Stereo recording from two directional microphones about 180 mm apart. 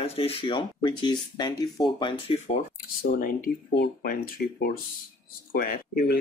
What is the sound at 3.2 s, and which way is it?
Speech, 50° left (ahead or behind).